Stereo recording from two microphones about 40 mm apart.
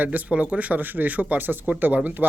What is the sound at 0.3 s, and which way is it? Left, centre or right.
Speech, right.